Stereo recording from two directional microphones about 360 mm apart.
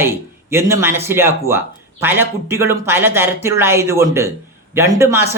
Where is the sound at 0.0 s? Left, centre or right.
Centre.